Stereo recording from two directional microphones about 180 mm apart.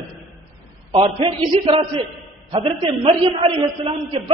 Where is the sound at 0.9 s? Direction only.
30° right (ahead or behind).